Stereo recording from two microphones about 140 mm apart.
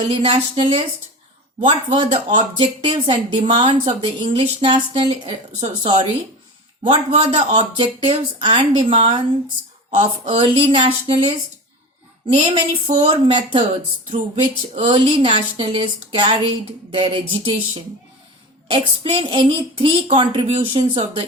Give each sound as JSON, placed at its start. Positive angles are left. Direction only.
{"t": 0.1, "sound": "a woman's voice", "side_deg": -40}
{"t": 5.8, "sound": "speech", "side_deg": -35}
{"t": 6.8, "sound": "a woman's voice", "side_deg": -50}
{"t": 12.3, "sound": "a woman's voice", "side_deg": -45}
{"t": 14.8, "sound": "speech", "side_deg": -35}
{"t": 18.7, "sound": "speech", "side_deg": -40}